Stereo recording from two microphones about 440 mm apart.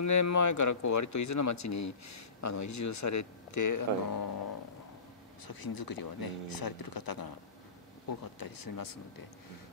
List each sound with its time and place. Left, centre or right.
0.0 s speech: left
5.5 s speech: left